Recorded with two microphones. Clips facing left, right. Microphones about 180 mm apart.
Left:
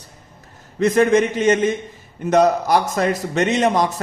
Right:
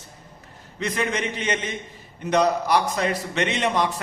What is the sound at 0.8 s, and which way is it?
A man's voice, 45° left (ahead or behind).